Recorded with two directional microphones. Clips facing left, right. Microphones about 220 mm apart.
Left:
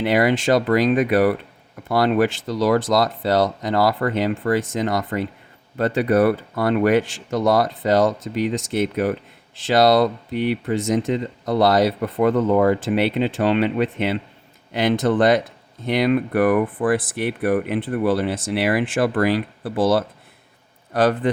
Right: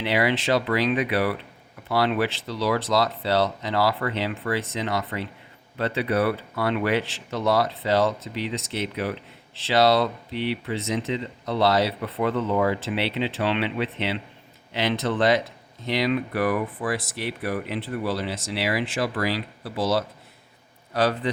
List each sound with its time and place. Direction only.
0.0 s speech: 45° left (ahead or behind)